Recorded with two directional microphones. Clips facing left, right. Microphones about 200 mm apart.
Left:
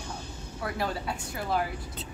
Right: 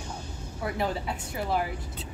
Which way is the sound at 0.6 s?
20° right (ahead or behind).